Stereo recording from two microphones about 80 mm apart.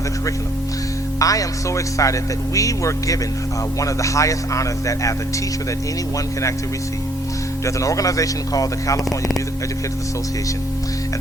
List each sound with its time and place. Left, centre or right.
1.2 s a man's voice: left
7.6 s a man's voice: left